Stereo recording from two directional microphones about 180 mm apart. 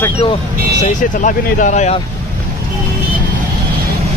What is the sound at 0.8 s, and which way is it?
Speech, 45° left (ahead or behind).